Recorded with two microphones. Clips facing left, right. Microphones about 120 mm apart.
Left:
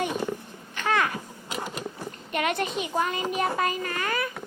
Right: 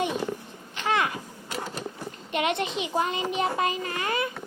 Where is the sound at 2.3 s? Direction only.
25° right (ahead or behind).